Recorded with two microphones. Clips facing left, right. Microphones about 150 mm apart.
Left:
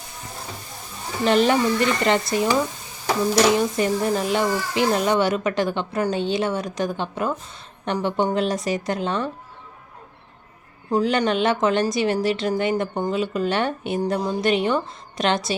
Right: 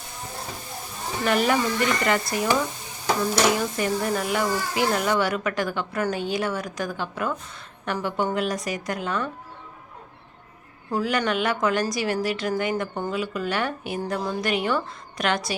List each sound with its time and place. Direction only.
1.2 s speech: 25° left (ahead or behind)
3.8 s speech: 25° left (ahead or behind)
10.9 s speech: 20° left (ahead or behind)